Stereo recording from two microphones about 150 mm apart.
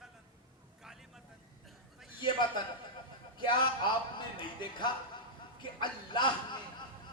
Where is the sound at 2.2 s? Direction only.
30° left (ahead or behind).